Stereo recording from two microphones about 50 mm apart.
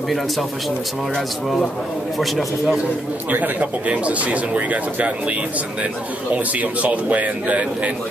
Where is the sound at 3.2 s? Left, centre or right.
Right.